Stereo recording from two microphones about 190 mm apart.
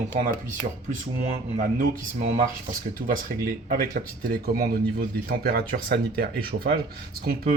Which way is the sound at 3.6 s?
45° right (ahead or behind).